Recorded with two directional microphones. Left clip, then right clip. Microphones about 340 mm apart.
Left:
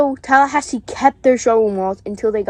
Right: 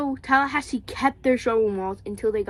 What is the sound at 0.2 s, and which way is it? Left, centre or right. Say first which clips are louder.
Speech: left 8 dB; centre.